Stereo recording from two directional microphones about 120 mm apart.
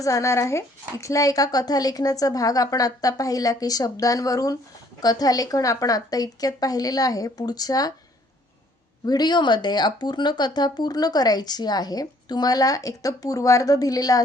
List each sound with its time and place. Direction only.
0.0 s speech: 25° left (ahead or behind)
9.0 s speech: 35° left (ahead or behind)